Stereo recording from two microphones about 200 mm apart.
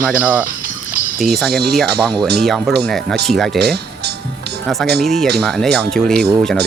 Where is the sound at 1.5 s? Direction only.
55° right (ahead or behind).